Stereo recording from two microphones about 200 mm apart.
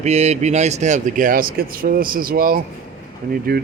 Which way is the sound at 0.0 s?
35° right (ahead or behind).